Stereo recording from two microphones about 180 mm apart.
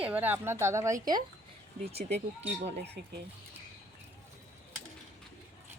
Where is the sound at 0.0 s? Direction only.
10° right (ahead or behind).